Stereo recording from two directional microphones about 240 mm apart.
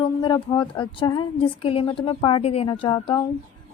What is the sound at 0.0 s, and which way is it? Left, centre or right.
A woman's voice, centre.